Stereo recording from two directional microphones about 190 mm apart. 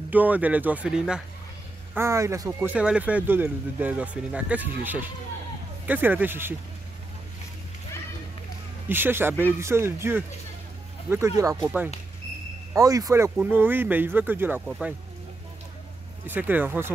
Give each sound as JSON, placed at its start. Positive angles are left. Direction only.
{"t": 0.1, "sound": "speech", "side_deg": -10}
{"t": 2.0, "sound": "speech", "side_deg": -15}
{"t": 8.8, "sound": "speech", "side_deg": -10}
{"t": 16.3, "sound": "speech", "side_deg": -10}